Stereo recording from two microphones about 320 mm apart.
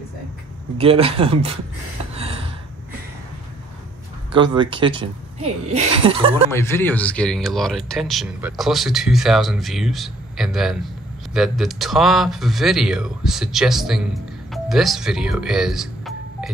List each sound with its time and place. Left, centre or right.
0.7 s speech: centre
4.3 s speech: centre
6.5 s speech: centre